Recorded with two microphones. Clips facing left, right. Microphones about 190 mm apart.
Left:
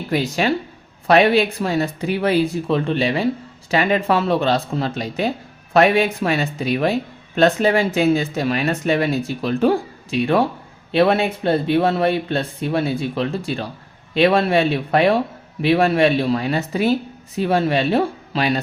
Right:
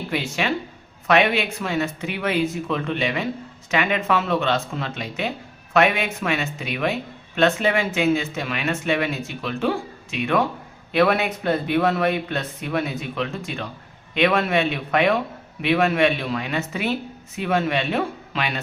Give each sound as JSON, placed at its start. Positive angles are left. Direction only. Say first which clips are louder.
{"t": 0.1, "sound": "speech", "louder": "left 6 dB", "side_deg": 35}